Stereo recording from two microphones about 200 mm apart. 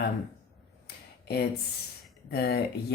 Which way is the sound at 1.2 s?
55° left (ahead or behind).